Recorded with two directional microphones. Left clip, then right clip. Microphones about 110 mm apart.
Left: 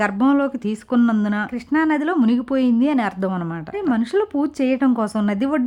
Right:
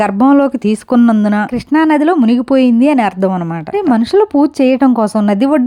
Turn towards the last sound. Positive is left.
turn(degrees=-45)  # may be behind; listen again after turning